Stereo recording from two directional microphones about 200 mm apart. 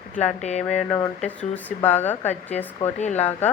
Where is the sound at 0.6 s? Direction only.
5° left (ahead or behind).